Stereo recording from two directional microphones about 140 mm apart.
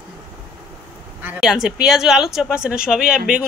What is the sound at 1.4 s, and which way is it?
Speech, 5° right (ahead or behind).